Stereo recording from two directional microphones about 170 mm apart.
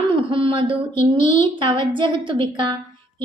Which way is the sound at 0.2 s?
30° right (ahead or behind).